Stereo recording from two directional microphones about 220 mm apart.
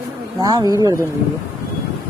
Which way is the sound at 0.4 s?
15° right (ahead or behind).